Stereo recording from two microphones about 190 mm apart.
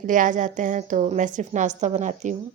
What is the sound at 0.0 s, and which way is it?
A woman's voice, 45° right (ahead or behind).